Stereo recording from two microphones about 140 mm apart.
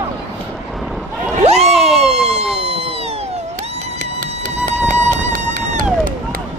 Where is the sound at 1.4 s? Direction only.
50° right (ahead or behind).